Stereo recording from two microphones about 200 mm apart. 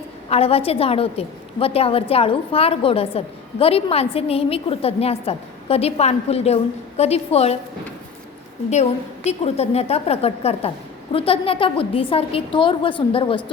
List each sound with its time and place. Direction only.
0.3 s a woman's voice: 30° left (ahead or behind)
8.7 s a woman's voice: 35° left (ahead or behind)